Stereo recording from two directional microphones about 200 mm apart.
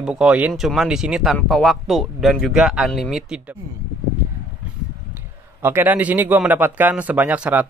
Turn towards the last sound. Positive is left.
turn(degrees=-10)  # may be behind; listen again after turning